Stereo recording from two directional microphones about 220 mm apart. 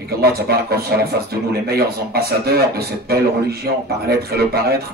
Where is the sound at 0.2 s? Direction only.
45° right (ahead or behind).